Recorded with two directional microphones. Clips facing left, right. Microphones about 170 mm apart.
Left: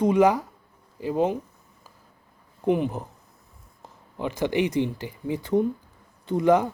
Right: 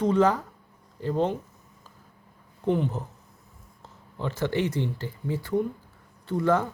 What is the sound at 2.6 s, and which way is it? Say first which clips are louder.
Speech: left 2 dB; 15° left (ahead or behind).